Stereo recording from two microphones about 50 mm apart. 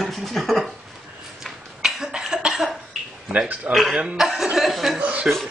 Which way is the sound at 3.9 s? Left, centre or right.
Right.